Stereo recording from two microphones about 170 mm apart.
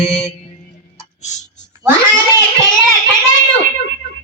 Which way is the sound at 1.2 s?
45° left (ahead or behind).